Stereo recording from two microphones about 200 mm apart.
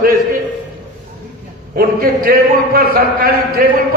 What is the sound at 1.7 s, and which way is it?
A man's voice, 45° right (ahead or behind).